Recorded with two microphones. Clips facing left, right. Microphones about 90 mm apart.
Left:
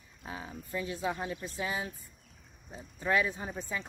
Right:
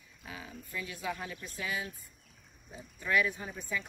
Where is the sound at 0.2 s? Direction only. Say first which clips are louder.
Left 4 dB; 35° left (ahead or behind).